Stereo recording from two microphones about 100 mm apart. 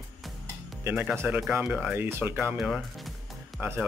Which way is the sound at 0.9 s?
15° right (ahead or behind).